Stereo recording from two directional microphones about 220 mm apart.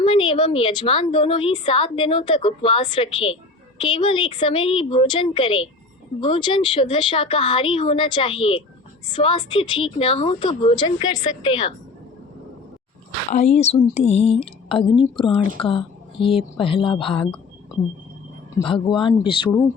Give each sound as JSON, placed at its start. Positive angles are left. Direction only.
{"t": 0.0, "sound": "a woman's voice", "side_deg": 25}
{"t": 13.3, "sound": "a woman's voice", "side_deg": 30}
{"t": 18.6, "sound": "a woman's voice", "side_deg": 20}